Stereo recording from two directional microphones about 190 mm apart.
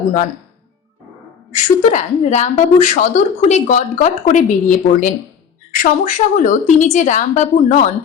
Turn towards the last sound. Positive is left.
turn(degrees=40)  # may be behind; listen again after turning